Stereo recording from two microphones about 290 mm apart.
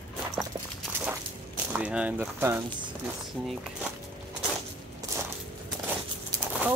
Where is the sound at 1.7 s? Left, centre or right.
Centre.